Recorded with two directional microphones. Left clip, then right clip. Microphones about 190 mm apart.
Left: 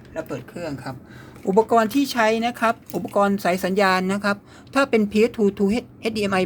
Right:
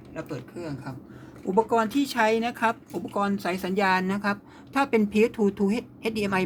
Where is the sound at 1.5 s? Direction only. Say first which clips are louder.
Left 5 dB; 45° left (ahead or behind); by 2.7 s 30° left (ahead or behind).